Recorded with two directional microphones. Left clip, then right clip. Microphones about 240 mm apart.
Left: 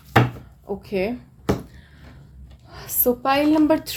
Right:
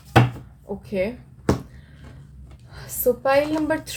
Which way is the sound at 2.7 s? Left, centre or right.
Left.